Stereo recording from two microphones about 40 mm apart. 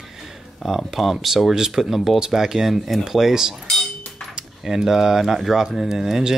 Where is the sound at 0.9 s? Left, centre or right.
Centre.